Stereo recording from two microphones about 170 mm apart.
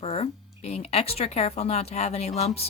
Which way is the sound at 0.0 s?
35° left (ahead or behind).